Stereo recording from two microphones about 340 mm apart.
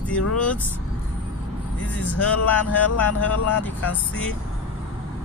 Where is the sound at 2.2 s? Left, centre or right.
Left.